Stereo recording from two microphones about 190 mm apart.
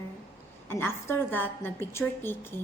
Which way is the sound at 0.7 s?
10° left (ahead or behind).